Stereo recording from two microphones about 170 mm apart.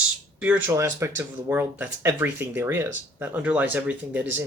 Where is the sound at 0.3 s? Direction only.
10° right (ahead or behind).